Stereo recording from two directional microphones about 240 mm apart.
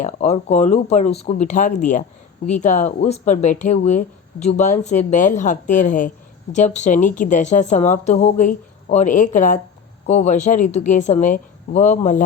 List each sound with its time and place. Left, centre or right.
0.0 s speech: left